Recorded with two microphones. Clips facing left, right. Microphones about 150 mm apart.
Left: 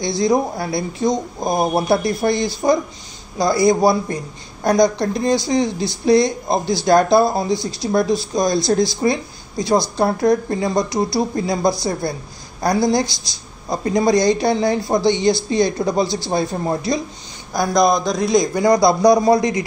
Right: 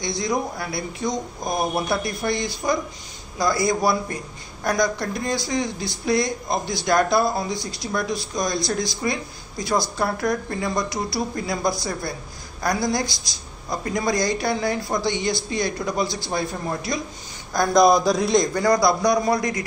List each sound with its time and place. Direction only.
0.0 s speech: 30° left (ahead or behind)
17.7 s a man's voice: 5° right (ahead or behind)
18.6 s speech: 20° left (ahead or behind)